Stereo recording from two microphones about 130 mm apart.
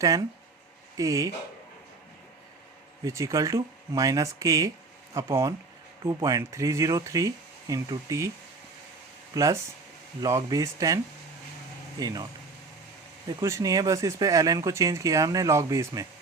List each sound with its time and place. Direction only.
0.0 s speech: 25° right (ahead or behind)
3.0 s speech: 25° right (ahead or behind)
9.3 s speech: 25° right (ahead or behind)